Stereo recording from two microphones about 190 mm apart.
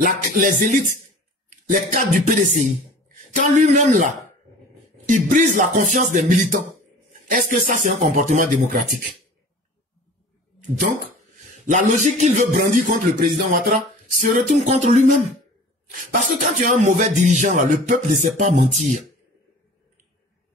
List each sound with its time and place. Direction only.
0.0 s music: 45° right (ahead or behind)
3.3 s a man's voice: 40° right (ahead or behind)
7.6 s music: 45° right (ahead or behind)
11.6 s speech: 40° right (ahead or behind)